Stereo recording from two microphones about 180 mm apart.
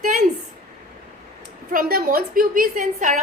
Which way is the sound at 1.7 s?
55° right (ahead or behind).